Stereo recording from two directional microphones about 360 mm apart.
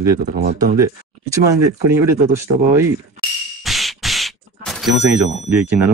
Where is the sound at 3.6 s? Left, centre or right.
Centre.